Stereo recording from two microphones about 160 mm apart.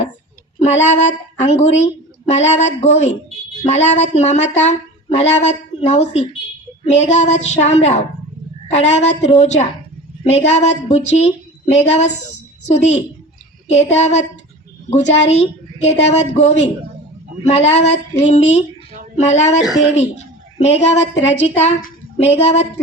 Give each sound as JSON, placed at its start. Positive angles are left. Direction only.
{"t": 0.6, "sound": "a woman's voice", "side_deg": 45}
{"t": 20.0, "sound": "a sound", "side_deg": 40}
{"t": 20.9, "sound": "a woman's voice", "side_deg": 45}